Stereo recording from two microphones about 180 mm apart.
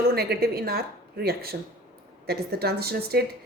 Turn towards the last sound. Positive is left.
turn(degrees=-60)  # may be behind; listen again after turning